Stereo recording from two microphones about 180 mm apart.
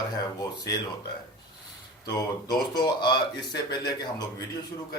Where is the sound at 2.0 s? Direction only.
20° left (ahead or behind).